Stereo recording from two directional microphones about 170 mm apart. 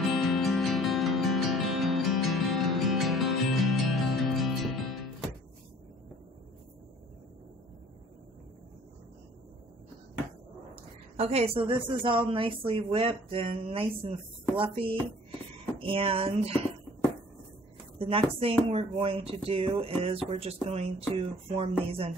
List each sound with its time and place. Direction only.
0.1 s music: centre (ahead or behind)
10.7 s a woman's voice: 35° right (ahead or behind)
17.9 s a woman's voice: 35° right (ahead or behind)